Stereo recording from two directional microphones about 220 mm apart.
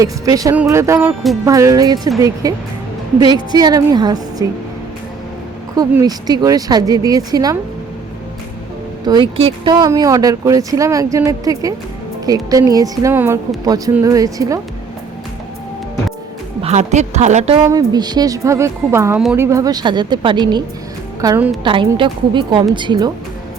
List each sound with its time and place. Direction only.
0.0 s speech: 15° right (ahead or behind)
0.9 s music: centre (ahead or behind)
1.5 s speech: 15° right (ahead or behind)
3.5 s speech: 15° right (ahead or behind)
5.7 s speech: 15° right (ahead or behind)
9.0 s speech: 20° right (ahead or behind)
16.6 s a woman's voice: 30° right (ahead or behind)
17.7 s speech: 15° right (ahead or behind)
21.6 s speech: 20° right (ahead or behind)